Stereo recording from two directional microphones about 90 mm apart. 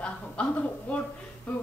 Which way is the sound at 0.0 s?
15° left (ahead or behind).